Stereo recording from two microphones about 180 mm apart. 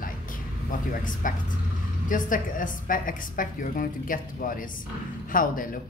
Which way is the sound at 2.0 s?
45° left (ahead or behind).